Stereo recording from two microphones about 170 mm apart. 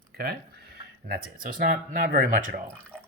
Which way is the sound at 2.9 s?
5° left (ahead or behind).